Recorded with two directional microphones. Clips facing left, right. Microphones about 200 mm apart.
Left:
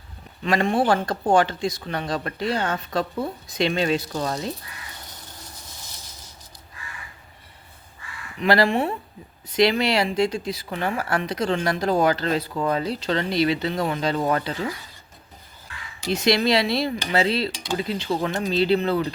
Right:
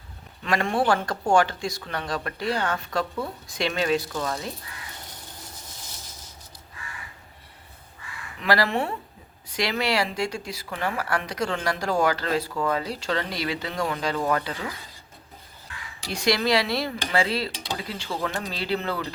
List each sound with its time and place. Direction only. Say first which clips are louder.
0.4 s speech: left 3 dB; 20° left (ahead or behind)
8.4 s speech: left 4 dB; 25° left (ahead or behind)
16.0 s speech: left 3 dB; 20° left (ahead or behind)